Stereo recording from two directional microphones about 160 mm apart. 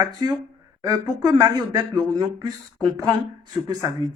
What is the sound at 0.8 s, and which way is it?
Speech, 25° right (ahead or behind).